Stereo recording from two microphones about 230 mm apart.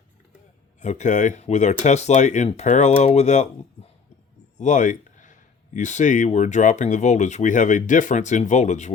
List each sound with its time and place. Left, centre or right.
0.8 s speech: left
4.5 s speech: left